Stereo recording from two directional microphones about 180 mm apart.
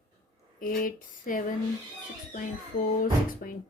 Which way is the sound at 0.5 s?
50° left (ahead or behind).